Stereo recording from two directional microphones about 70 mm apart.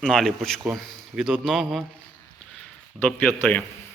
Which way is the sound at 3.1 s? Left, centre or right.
Left.